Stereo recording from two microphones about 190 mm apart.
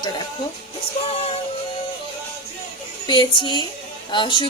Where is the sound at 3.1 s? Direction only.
25° left (ahead or behind).